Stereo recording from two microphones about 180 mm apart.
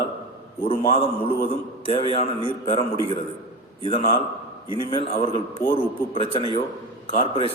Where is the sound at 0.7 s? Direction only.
30° left (ahead or behind).